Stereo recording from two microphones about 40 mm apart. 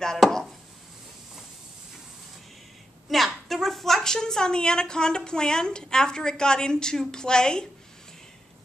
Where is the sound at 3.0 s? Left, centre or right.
Centre.